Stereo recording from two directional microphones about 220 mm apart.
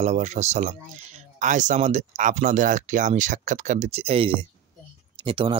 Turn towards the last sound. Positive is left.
turn(degrees=-25)  # may be behind; listen again after turning